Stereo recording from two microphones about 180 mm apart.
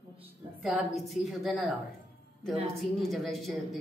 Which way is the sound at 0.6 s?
Centre (ahead or behind).